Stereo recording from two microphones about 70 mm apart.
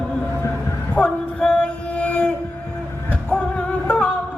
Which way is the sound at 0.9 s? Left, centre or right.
Centre.